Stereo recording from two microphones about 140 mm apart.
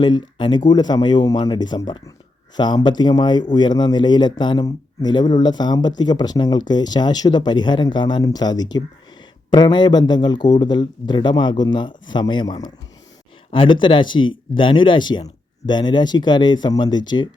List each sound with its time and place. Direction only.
0.0 s speech: 30° left (ahead or behind)